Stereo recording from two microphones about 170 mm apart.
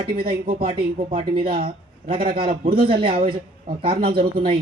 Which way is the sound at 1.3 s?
35° right (ahead or behind).